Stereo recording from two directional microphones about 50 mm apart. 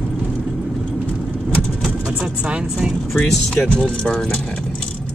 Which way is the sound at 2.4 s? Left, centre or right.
Right.